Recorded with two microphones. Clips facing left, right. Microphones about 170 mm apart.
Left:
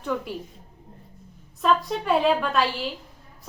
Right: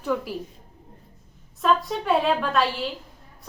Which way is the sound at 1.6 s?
Centre (ahead or behind).